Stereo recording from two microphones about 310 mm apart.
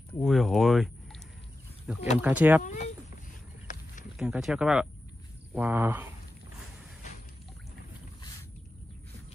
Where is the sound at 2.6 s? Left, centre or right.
Left.